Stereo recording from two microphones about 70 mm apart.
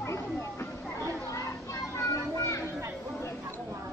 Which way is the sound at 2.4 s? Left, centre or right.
Left.